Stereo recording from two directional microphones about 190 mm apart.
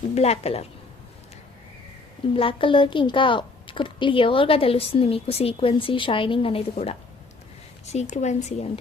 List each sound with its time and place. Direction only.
0.1 s speech: 35° left (ahead or behind)
2.3 s a woman's voice: 30° left (ahead or behind)
7.9 s speech: 40° left (ahead or behind)